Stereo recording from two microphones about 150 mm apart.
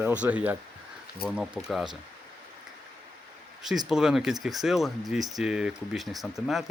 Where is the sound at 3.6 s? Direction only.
Centre (ahead or behind).